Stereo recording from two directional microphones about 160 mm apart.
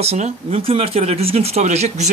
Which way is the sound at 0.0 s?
40° right (ahead or behind).